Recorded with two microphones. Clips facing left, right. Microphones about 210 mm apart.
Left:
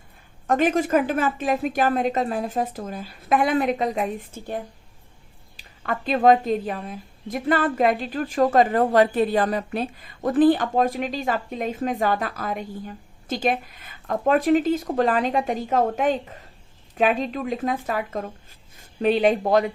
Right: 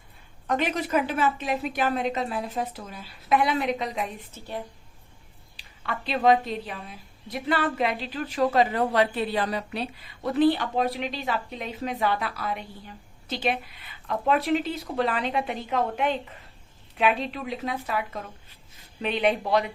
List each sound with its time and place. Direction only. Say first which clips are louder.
0.4 s a woman's voice: left 6 dB; 45° left (ahead or behind)
5.5 s a woman's voice: left 5 dB; 45° left (ahead or behind)